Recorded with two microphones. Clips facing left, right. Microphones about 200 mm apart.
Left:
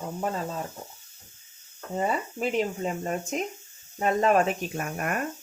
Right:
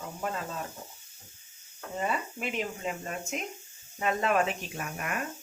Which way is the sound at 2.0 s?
35° left (ahead or behind).